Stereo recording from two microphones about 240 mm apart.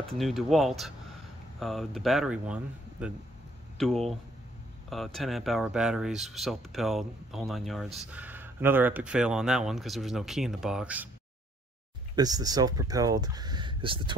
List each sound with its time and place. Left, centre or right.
0.2 s speech: centre
12.2 s speech: centre